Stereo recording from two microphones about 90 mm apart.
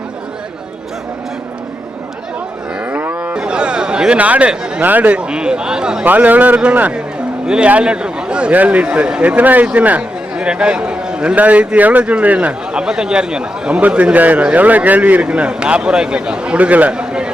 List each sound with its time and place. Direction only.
2.9 s a man's voice: 20° right (ahead or behind)